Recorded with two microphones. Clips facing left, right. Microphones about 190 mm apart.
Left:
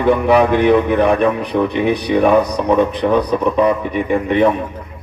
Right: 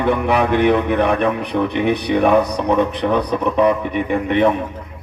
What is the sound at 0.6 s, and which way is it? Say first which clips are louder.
Speech: left 3 dB; 60° right (ahead or behind).